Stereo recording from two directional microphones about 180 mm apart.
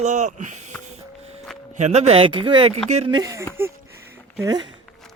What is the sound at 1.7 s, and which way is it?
Speech, 40° right (ahead or behind).